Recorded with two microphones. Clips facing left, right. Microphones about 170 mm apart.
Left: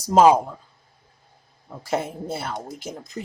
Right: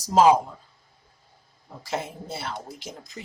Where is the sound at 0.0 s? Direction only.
55° left (ahead or behind).